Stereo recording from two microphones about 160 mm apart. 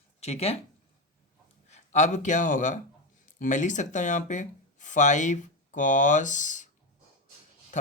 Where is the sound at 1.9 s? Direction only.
50° left (ahead or behind).